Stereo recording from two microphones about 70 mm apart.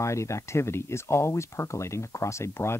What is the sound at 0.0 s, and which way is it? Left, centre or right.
Speech, left.